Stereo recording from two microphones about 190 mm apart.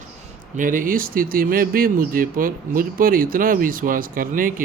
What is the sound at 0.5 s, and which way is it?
Speech, 45° right (ahead or behind).